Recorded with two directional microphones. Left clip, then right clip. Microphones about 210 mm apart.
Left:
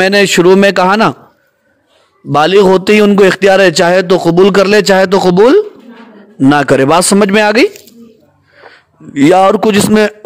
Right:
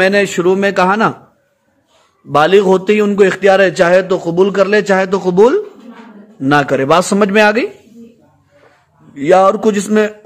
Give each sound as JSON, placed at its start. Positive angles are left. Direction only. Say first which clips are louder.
{"t": 0.0, "sound": "a man's voice", "louder": "left 4 dB", "side_deg": 45}
{"t": 2.3, "sound": "a man's voice", "louder": "left 3 dB", "side_deg": 45}